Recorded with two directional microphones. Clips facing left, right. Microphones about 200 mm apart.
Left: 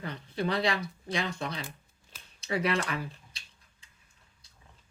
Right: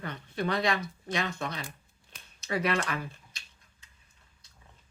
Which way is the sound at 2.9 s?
30° left (ahead or behind).